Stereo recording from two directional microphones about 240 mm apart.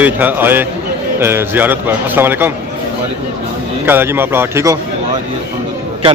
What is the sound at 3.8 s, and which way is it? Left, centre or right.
Speech, centre.